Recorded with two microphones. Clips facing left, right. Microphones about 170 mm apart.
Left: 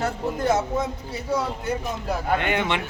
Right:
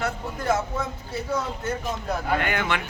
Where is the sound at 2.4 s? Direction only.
25° left (ahead or behind).